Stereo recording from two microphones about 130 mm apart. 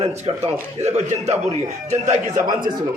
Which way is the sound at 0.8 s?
60° right (ahead or behind).